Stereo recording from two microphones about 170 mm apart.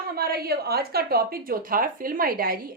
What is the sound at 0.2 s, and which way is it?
A woman's voice, 65° right (ahead or behind).